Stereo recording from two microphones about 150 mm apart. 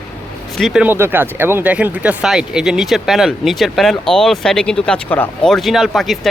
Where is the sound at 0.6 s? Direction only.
5° right (ahead or behind).